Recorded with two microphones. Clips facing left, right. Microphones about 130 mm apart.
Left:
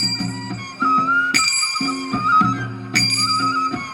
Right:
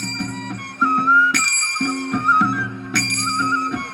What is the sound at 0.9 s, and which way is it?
Music, 25° left (ahead or behind).